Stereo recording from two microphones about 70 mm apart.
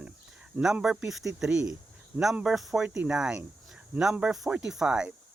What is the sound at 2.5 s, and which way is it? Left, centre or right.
Speech, centre.